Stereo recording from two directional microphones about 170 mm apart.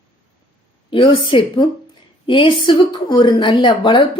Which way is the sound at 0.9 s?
30° left (ahead or behind).